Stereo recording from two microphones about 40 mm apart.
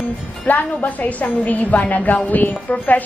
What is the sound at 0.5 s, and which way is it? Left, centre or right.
A woman's voice, left.